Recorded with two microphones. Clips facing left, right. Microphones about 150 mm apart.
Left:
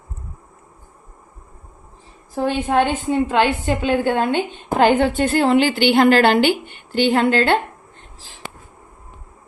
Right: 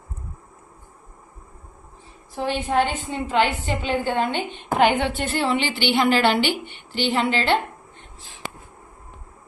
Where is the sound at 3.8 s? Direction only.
50° left (ahead or behind).